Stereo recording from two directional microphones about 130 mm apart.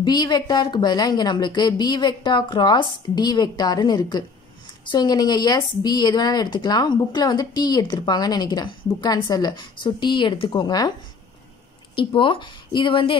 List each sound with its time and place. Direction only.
0.0 s a woman's voice: 35° left (ahead or behind)
11.9 s a woman's voice: 40° left (ahead or behind)